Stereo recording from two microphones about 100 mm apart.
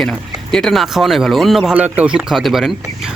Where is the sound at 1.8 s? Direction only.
15° right (ahead or behind).